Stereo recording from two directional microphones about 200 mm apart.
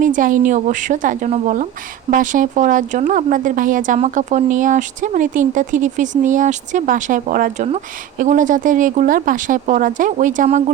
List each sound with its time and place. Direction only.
0.0 s speech: 40° right (ahead or behind)